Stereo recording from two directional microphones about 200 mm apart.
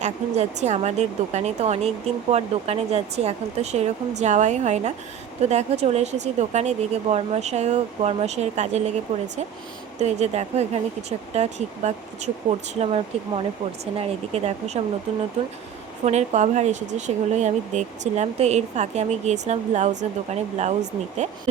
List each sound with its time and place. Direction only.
0.0 s speech: 35° right (ahead or behind)
16.0 s speech: 35° right (ahead or behind)